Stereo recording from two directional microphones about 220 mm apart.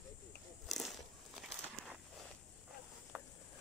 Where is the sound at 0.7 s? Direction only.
Centre (ahead or behind).